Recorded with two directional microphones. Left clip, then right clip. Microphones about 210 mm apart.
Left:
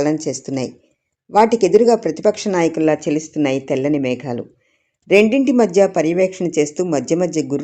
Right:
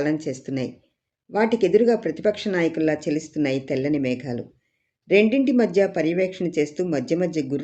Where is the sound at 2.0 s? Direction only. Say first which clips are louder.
Left 6 dB; 10° left (ahead or behind).